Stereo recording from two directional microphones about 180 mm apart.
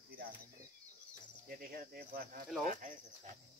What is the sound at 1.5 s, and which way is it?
Speech, 55° right (ahead or behind).